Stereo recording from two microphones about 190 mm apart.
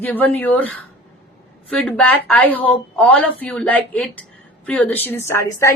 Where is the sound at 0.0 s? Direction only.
10° left (ahead or behind).